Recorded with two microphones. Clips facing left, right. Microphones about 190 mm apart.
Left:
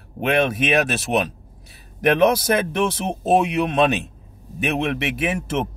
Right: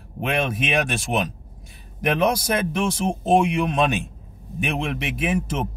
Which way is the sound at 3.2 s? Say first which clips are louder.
Left 1 dB; 5° left (ahead or behind).